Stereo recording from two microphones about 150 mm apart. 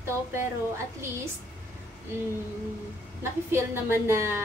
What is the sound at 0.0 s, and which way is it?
Speech, 15° right (ahead or behind).